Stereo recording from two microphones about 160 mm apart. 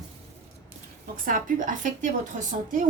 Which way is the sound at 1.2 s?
55° right (ahead or behind).